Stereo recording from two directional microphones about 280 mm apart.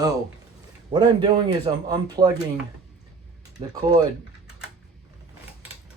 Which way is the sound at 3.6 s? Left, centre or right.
Centre.